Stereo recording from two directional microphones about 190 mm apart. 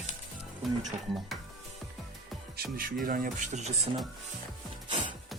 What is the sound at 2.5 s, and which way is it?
Speech, 50° right (ahead or behind).